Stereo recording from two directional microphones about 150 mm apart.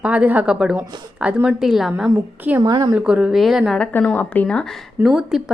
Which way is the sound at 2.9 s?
5° right (ahead or behind).